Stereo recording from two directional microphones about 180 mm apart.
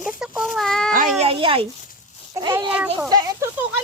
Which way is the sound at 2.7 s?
5° right (ahead or behind).